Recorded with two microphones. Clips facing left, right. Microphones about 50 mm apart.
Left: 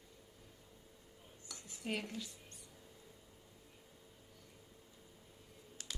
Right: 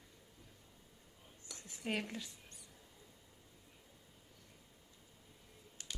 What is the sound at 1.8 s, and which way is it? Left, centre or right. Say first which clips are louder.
Speech: right 2 dB; right.